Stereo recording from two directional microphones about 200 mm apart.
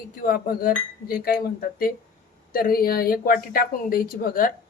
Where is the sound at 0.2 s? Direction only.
45° left (ahead or behind).